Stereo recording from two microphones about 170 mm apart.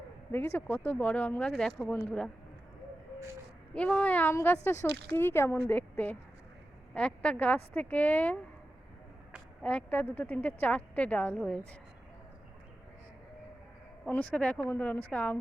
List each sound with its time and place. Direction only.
0.3 s speech: 15° left (ahead or behind)
3.8 s speech: 5° left (ahead or behind)
4.9 s speech: 75° right (ahead or behind)
5.1 s a woman's voice: 15° left (ahead or behind)
9.6 s speech: 10° left (ahead or behind)
14.1 s speech: 10° left (ahead or behind)